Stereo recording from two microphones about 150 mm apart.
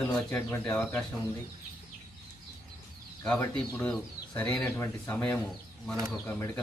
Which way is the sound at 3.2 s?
10° left (ahead or behind).